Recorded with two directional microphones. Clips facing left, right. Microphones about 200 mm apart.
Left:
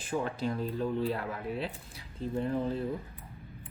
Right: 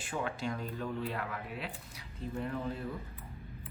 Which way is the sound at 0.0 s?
40° left (ahead or behind).